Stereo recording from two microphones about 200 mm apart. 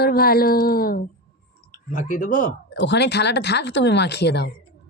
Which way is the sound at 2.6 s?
60° left (ahead or behind).